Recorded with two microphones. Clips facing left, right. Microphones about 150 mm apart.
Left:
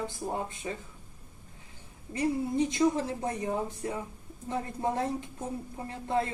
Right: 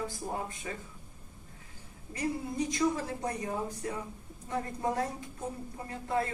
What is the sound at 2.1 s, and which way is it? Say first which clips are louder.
A woman's voice: left 5 dB; 25° left (ahead or behind).